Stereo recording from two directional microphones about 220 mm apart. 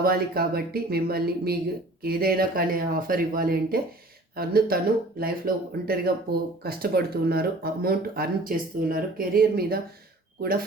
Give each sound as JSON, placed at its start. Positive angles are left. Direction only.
{"t": 0.0, "sound": "speech", "side_deg": -45}